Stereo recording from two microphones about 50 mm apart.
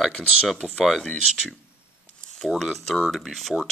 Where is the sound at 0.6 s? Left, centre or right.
Centre.